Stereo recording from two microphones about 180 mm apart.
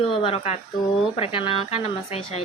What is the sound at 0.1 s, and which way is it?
A woman's voice, 30° left (ahead or behind).